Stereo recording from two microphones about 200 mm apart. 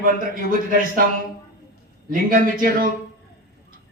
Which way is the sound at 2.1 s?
45° right (ahead or behind).